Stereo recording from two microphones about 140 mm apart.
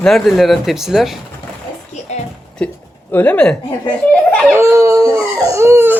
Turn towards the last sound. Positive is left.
turn(degrees=-20)  # may be behind; listen again after turning